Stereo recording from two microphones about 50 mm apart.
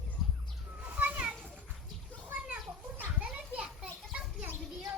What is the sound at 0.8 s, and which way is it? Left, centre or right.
Children playing, right.